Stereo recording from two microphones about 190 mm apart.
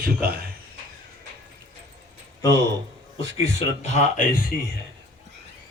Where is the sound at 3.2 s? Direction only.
30° left (ahead or behind).